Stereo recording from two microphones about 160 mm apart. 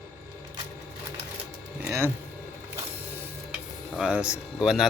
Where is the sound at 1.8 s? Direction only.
15° right (ahead or behind).